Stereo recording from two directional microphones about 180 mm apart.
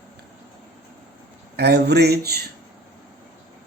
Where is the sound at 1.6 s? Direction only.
65° right (ahead or behind).